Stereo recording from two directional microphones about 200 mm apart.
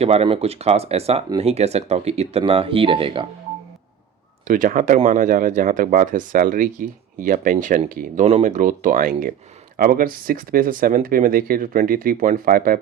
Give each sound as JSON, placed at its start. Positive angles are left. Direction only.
{"t": 0.0, "sound": "speech", "side_deg": -30}
{"t": 4.4, "sound": "speech", "side_deg": -40}